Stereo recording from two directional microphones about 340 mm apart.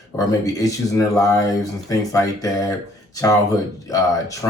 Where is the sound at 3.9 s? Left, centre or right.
Centre.